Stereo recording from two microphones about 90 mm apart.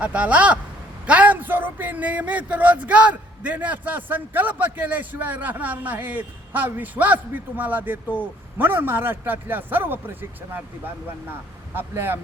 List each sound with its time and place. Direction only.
0.0 s a man's voice: 15° right (ahead or behind)
8.0 s a man's voice: 15° left (ahead or behind)
8.5 s speech: 25° right (ahead or behind)
11.7 s speech: 25° right (ahead or behind)